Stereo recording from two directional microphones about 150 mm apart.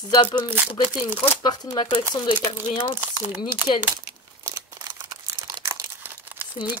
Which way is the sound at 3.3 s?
15° right (ahead or behind).